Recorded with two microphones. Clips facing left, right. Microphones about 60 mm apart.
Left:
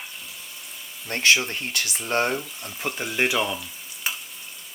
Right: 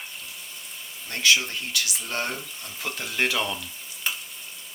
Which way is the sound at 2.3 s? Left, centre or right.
Centre.